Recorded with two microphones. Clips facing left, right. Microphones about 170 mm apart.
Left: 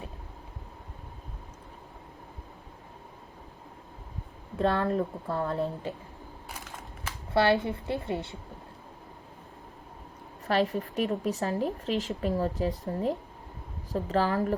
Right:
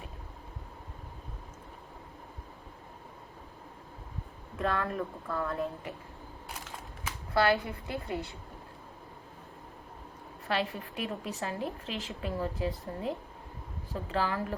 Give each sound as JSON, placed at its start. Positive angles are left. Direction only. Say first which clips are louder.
{"t": 4.5, "sound": "a woman's voice", "louder": "left 6 dB", "side_deg": 30}
{"t": 7.3, "sound": "a woman's voice", "louder": "left 3 dB", "side_deg": 25}
{"t": 10.4, "sound": "a woman's voice", "louder": "left 6 dB", "side_deg": 40}